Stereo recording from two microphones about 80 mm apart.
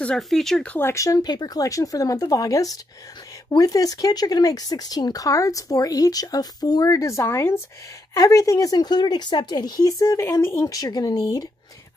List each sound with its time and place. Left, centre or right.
0.3 s speech: centre
0.7 s speech: left
1.0 s speech: left
8.1 s speech: left
10.3 s speech: left
10.7 s speech: left